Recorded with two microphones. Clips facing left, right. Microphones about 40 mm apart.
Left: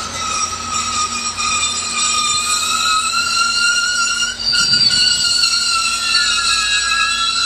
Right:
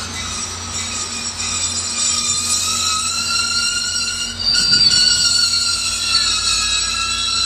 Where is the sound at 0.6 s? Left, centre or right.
Left.